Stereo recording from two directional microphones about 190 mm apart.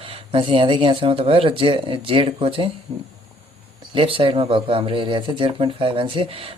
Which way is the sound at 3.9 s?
30° right (ahead or behind).